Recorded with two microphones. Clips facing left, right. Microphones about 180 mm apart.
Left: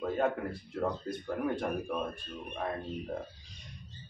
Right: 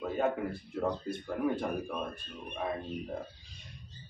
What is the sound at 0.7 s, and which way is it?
Speech, 5° right (ahead or behind).